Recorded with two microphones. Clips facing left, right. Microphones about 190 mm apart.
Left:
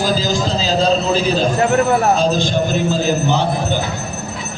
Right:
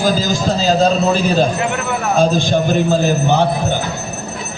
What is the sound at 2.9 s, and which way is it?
Speech, 50° right (ahead or behind).